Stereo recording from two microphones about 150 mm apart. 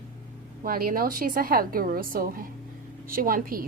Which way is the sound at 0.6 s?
75° right (ahead or behind).